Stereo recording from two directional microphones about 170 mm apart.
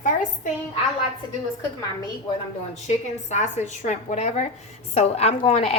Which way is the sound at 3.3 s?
45° left (ahead or behind).